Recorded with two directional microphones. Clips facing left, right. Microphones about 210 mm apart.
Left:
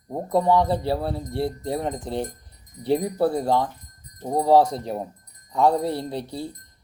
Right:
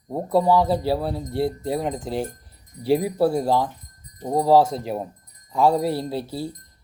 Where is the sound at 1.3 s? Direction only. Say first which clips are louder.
Right 4 dB; 25° right (ahead or behind).